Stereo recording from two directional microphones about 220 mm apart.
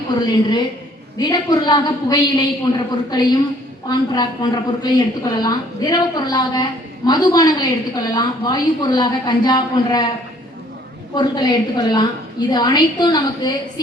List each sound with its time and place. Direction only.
0.1 s a woman's voice: 20° left (ahead or behind)
11.1 s a woman's voice: 20° left (ahead or behind)